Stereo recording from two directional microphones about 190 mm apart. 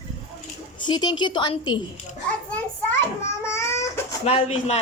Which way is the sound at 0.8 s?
25° left (ahead or behind).